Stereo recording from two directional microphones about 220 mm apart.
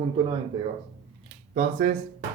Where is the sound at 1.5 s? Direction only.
40° right (ahead or behind).